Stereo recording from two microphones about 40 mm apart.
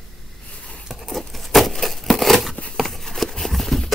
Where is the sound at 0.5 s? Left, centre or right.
Left.